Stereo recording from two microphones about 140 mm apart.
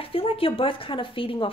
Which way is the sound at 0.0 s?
40° left (ahead or behind).